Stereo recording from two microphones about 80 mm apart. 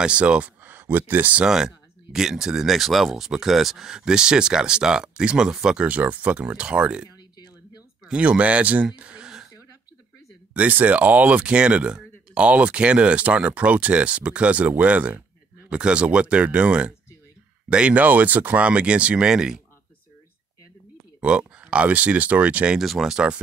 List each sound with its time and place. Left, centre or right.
0.0 s speech: centre
1.4 s speech: centre
8.9 s a sound: centre
10.5 s speech: right
21.2 s speech: centre
22.8 s speech: centre